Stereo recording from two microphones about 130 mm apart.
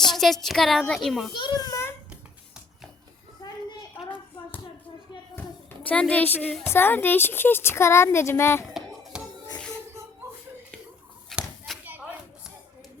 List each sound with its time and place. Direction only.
0.1 s a woman's voice: centre (ahead or behind)
1.3 s a child's voice: 35° left (ahead or behind)
5.9 s a woman's voice: 10° left (ahead or behind)
9.1 s music: 5° right (ahead or behind)
11.3 s a sound: centre (ahead or behind)
11.9 s a sound: 15° right (ahead or behind)